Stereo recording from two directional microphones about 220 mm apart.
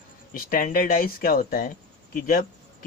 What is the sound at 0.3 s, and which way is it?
Speech, 40° left (ahead or behind).